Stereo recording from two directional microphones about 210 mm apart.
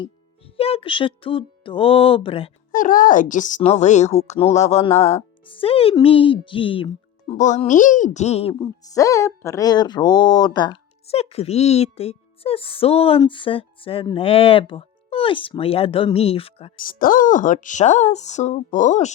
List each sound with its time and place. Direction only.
0.0 s speech: 25° left (ahead or behind)
2.7 s a woman's voice: 40° left (ahead or behind)
7.3 s a woman's voice: 35° left (ahead or behind)
8.5 s speech: 15° left (ahead or behind)
16.7 s a woman's voice: 40° left (ahead or behind)